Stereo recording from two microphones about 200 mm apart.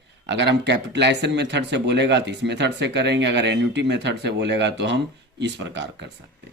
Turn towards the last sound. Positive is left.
turn(degrees=-65)  # may be behind; listen again after turning